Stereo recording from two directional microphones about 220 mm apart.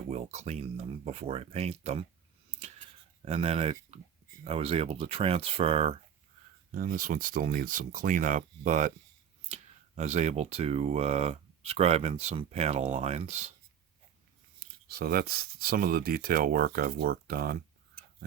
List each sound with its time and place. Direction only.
0.1 s speech: 30° right (ahead or behind)
3.2 s speech: 25° right (ahead or behind)
6.7 s speech: 40° right (ahead or behind)
14.6 s speech: 45° right (ahead or behind)